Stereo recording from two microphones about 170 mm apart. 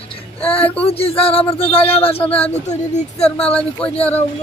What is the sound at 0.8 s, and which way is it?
Speech, 35° left (ahead or behind).